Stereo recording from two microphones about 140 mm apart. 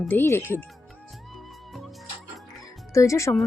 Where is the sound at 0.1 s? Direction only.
15° left (ahead or behind).